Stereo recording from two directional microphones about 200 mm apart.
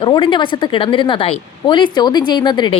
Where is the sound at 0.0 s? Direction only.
25° left (ahead or behind).